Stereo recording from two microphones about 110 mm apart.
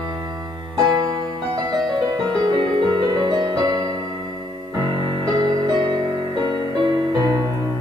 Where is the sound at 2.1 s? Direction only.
40° right (ahead or behind).